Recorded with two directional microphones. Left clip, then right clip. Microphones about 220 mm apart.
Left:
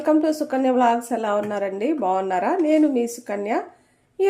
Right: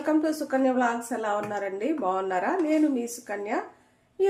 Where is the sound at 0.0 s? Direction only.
35° left (ahead or behind).